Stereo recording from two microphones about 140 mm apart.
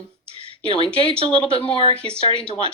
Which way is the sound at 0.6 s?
35° left (ahead or behind).